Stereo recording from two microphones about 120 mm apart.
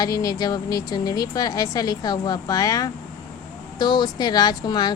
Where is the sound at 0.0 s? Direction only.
30° left (ahead or behind).